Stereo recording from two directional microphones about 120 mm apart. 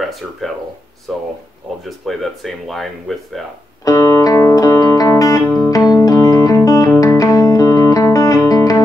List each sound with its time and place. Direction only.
0.0 s speech: centre (ahead or behind)
3.8 s music: 25° left (ahead or behind)